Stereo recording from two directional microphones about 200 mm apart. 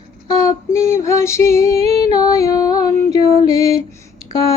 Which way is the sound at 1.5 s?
30° right (ahead or behind).